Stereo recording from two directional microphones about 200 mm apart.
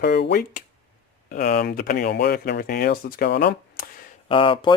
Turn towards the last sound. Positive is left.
turn(degrees=25)  # may be behind; listen again after turning